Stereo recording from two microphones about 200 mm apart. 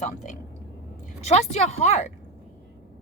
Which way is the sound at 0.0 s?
40° left (ahead or behind).